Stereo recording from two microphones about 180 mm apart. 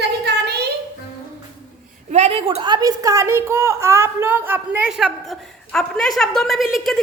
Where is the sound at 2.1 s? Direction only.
35° right (ahead or behind).